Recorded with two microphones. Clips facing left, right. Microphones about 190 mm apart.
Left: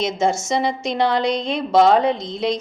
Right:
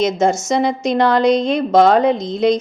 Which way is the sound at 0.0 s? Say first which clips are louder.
Right 4 dB; 40° right (ahead or behind).